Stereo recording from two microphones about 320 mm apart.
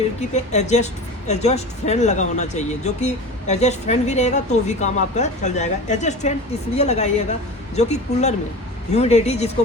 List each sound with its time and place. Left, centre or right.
0.3 s speech: left